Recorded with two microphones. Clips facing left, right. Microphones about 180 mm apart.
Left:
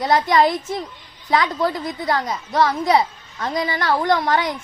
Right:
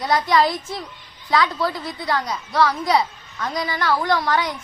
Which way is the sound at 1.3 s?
20° left (ahead or behind).